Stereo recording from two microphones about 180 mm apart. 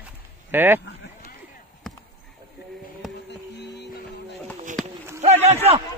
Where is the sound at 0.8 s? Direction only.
70° left (ahead or behind).